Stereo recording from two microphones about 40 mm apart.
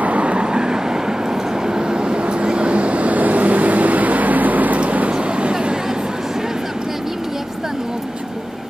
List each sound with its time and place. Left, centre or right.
0.0 s vehicle: right
5.1 s vehicle: right